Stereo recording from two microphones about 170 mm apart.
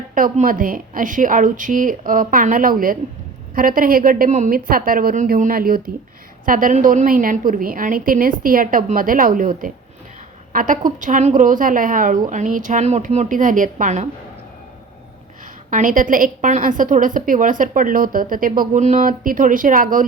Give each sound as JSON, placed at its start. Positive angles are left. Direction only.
{"t": 0.1, "sound": "a woman's voice", "side_deg": -50}
{"t": 15.7, "sound": "a woman's voice", "side_deg": -50}